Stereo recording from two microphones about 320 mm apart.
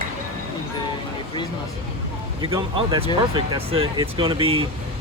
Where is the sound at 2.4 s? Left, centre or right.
Centre.